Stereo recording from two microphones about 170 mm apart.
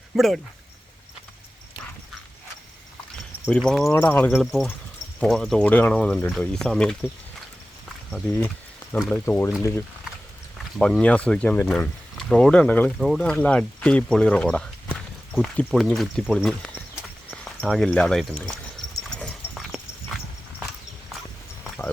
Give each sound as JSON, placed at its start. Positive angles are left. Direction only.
{"t": 0.1, "sound": "speech", "side_deg": 0}
{"t": 3.4, "sound": "speech", "side_deg": 5}
{"t": 4.3, "sound": "speech", "side_deg": 0}
{"t": 8.1, "sound": "a sound", "side_deg": 10}
{"t": 9.0, "sound": "speech", "side_deg": 10}
{"t": 10.8, "sound": "speech", "side_deg": 5}
{"t": 19.2, "sound": "dog", "side_deg": 0}